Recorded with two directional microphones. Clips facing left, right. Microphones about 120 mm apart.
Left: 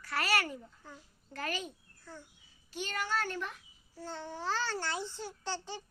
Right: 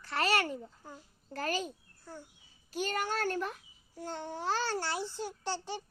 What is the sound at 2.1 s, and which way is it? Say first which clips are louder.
Speech: right 2 dB; 15° right (ahead or behind).